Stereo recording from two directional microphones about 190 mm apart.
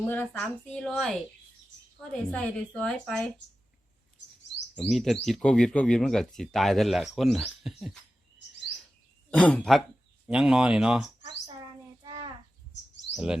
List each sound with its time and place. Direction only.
0.0 s speech: 10° left (ahead or behind)
4.2 s chirp: 70° left (ahead or behind)
4.8 s speech: centre (ahead or behind)
9.3 s speech: 5° left (ahead or behind)
12.0 s a sound: 25° right (ahead or behind)
13.1 s speech: 5° right (ahead or behind)